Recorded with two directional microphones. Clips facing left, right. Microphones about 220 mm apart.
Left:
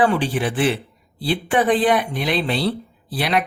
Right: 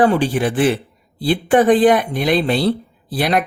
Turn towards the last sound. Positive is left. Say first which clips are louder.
# right 3 dB
turn(degrees=-45)  # may be behind; listen again after turning